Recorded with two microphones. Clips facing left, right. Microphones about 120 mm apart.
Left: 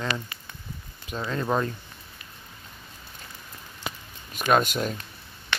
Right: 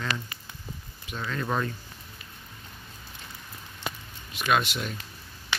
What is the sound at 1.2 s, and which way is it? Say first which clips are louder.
Speech: left 3 dB; 20° left (ahead or behind).